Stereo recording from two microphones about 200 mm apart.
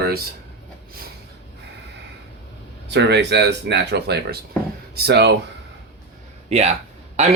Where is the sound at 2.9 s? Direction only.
60° right (ahead or behind).